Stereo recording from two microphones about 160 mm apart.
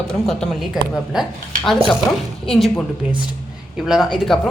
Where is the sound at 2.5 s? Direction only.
Centre (ahead or behind).